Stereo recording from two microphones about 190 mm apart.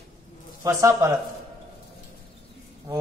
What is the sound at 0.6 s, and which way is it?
Speech, 15° right (ahead or behind).